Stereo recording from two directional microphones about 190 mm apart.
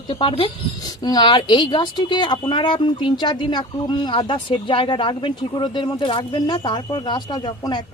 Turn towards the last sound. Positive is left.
turn(degrees=25)  # may be behind; listen again after turning